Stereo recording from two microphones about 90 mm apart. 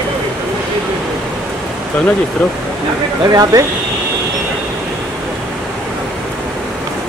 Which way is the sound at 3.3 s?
40° right (ahead or behind).